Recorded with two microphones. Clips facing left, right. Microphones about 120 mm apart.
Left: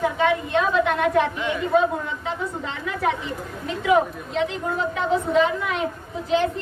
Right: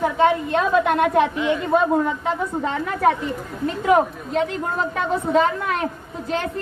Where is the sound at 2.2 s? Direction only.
45° right (ahead or behind).